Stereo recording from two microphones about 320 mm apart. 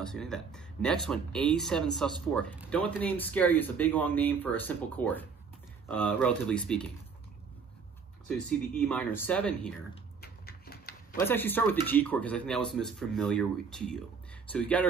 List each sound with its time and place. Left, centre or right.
0.0 s speech: centre
8.5 s speech: centre
10.2 s a sound: left
11.1 s speech: centre